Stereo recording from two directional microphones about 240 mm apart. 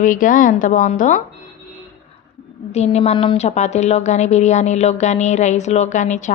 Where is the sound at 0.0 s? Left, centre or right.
Left.